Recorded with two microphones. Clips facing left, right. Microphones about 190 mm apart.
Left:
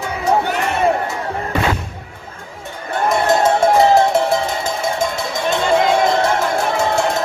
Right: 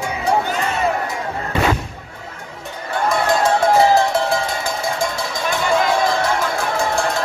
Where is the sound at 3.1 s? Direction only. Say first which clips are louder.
Left 2 dB; 25° left (ahead or behind).